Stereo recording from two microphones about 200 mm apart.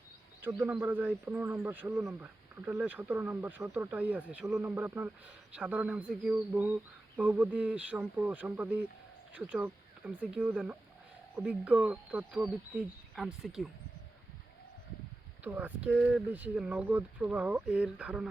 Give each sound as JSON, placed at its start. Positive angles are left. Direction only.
{"t": 0.4, "sound": "speech", "side_deg": -10}
{"t": 15.4, "sound": "speech", "side_deg": -10}